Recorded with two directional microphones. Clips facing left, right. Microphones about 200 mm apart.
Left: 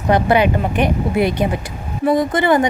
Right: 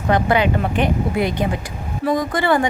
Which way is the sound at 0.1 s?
20° left (ahead or behind).